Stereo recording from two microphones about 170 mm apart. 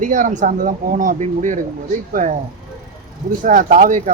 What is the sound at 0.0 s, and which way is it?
Speech, 50° right (ahead or behind).